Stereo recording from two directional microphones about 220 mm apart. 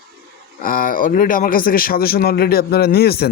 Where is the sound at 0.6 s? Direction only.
40° left (ahead or behind).